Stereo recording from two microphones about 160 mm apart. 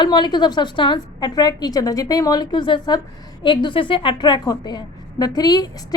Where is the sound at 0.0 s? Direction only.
30° left (ahead or behind).